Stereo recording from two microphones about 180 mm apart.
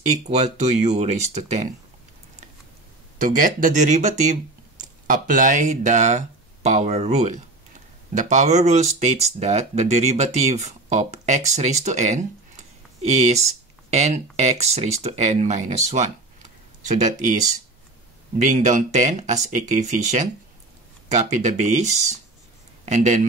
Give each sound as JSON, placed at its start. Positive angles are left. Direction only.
{"t": 0.1, "sound": "speech", "side_deg": -40}
{"t": 3.2, "sound": "speech", "side_deg": -45}
{"t": 18.4, "sound": "speech", "side_deg": -45}